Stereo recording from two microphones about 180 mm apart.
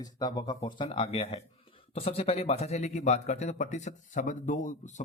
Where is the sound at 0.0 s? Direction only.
20° left (ahead or behind).